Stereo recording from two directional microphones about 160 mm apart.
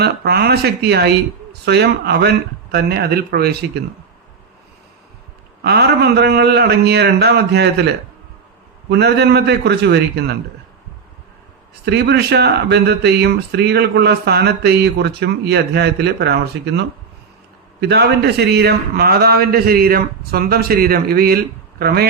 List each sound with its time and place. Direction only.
0.0 s speech: 90° right
5.6 s speech: 90° right
8.9 s speech: 90° right
11.9 s a man's voice: 90° right